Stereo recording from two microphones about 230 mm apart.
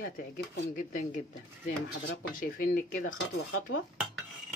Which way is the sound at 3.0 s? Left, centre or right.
Left.